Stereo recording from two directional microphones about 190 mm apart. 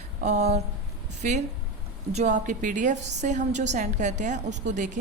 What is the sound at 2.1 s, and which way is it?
A woman's voice, 40° right (ahead or behind).